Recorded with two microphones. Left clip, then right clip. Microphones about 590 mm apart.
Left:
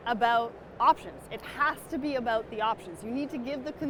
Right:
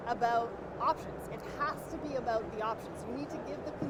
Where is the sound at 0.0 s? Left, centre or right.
Left.